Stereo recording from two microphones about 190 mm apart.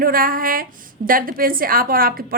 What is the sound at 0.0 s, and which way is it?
A woman's voice, 50° right (ahead or behind).